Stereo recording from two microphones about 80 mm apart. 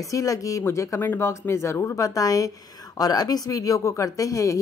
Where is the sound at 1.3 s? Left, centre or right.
Left.